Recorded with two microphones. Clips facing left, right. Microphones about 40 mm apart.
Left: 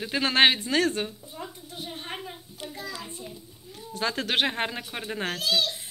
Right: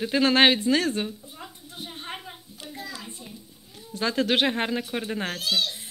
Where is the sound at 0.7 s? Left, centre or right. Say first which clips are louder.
Right 1 dB; left.